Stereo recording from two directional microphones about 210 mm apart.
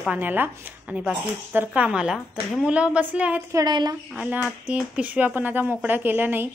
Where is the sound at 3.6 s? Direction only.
20° right (ahead or behind).